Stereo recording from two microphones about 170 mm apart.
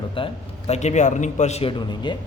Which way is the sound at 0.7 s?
40° left (ahead or behind).